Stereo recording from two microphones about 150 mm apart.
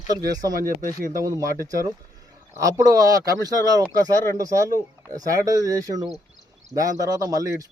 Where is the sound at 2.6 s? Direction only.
20° right (ahead or behind).